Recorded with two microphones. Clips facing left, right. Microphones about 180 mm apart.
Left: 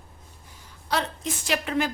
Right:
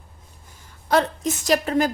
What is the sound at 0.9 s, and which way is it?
Speech, 50° right (ahead or behind).